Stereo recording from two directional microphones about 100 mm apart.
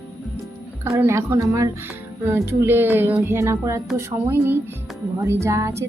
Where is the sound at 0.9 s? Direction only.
25° right (ahead or behind).